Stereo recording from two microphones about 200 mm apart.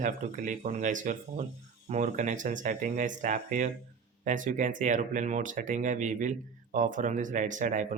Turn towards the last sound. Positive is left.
turn(degrees=-40)  # may be behind; listen again after turning